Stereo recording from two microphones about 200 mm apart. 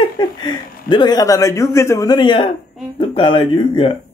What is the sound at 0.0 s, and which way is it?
Speech, 20° left (ahead or behind).